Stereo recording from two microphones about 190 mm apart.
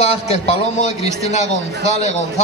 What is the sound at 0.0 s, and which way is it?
A man's voice, 35° left (ahead or behind).